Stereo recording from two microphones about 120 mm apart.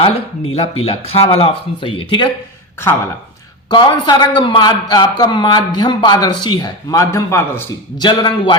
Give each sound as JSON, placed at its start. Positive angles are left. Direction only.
{"t": 0.0, "sound": "speech", "side_deg": 55}
{"t": 3.7, "sound": "a man's voice", "side_deg": 40}
{"t": 7.9, "sound": "a man's voice", "side_deg": 40}